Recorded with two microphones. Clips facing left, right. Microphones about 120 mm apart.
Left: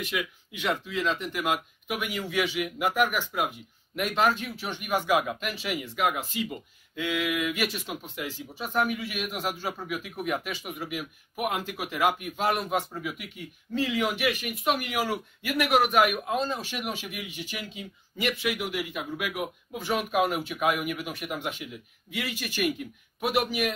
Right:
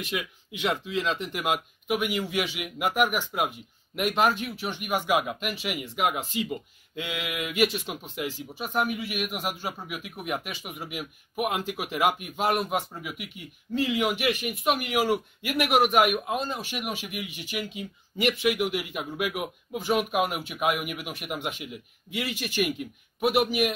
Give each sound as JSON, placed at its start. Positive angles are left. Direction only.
{"t": 0.5, "sound": "a man's voice", "side_deg": -20}